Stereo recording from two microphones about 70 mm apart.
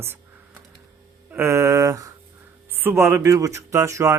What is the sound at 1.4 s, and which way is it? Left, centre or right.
Speech, right.